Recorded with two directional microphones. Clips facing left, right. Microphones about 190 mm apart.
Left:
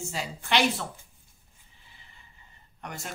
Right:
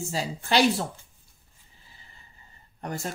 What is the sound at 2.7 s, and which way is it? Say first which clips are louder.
Speech: right 7 dB; 35° right (ahead or behind).